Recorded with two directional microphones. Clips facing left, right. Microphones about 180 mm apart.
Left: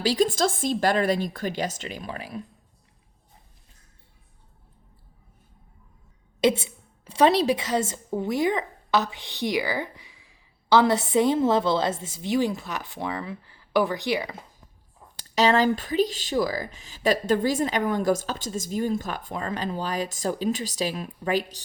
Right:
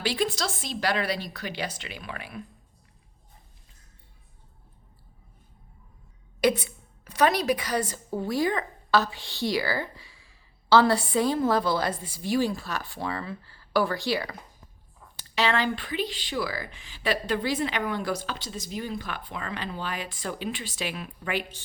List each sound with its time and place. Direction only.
0.0 s speech: 40° left (ahead or behind)
6.4 s a woman's voice: 25° left (ahead or behind)
15.4 s speech: 40° left (ahead or behind)